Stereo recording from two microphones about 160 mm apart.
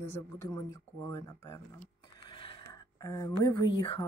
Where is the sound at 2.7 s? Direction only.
25° left (ahead or behind).